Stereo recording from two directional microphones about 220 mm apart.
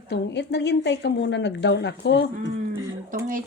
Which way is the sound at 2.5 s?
40° right (ahead or behind).